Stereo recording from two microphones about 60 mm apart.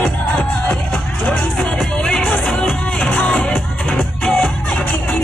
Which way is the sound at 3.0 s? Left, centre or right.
Left.